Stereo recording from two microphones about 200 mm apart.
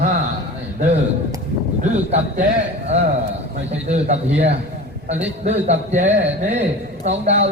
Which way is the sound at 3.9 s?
35° right (ahead or behind).